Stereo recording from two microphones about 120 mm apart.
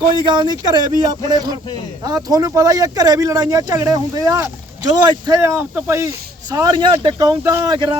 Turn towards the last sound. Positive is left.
turn(degrees=-30)  # may be behind; listen again after turning